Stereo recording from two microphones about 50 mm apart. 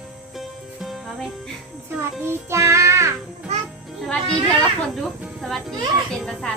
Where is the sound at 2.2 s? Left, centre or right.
Right.